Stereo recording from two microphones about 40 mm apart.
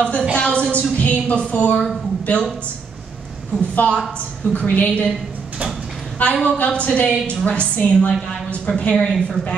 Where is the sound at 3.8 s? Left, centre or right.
Left.